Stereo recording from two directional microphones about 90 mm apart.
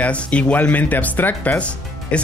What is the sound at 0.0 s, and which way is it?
Speech, 15° left (ahead or behind).